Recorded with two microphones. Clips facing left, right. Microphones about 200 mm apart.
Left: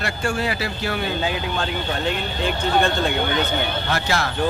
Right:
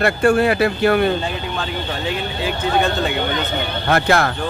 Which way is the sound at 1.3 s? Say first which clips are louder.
Even; centre (ahead or behind).